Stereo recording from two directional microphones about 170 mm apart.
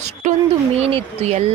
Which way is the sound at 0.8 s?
35° right (ahead or behind).